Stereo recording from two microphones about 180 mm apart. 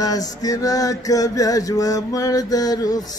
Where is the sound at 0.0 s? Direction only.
20° left (ahead or behind).